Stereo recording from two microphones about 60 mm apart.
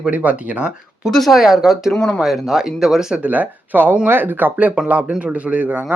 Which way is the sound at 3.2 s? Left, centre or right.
Right.